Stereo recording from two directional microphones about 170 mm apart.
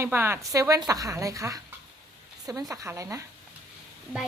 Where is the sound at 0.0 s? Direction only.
15° right (ahead or behind).